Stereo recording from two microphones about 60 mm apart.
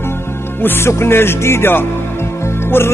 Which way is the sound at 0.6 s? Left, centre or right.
Left.